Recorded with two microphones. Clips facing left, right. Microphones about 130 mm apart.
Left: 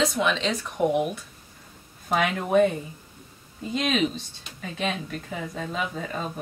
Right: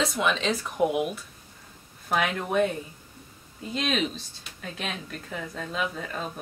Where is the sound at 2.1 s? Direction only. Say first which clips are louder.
Left 4 dB; centre (ahead or behind).